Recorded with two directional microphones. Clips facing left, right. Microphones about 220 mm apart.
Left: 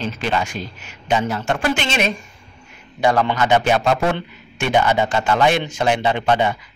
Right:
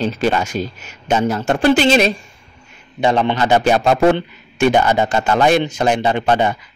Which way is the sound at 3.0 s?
25° right (ahead or behind).